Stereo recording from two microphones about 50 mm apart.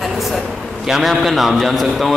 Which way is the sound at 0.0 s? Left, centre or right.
Centre.